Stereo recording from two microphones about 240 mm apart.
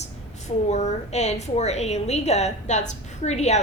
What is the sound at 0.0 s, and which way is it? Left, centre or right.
A woman's voice, left.